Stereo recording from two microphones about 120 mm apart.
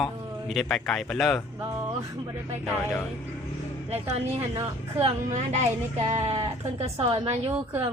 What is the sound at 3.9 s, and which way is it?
Speech, 60° right (ahead or behind).